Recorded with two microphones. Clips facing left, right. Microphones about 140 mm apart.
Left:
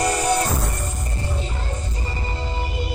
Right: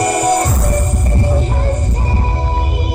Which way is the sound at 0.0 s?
70° right (ahead or behind).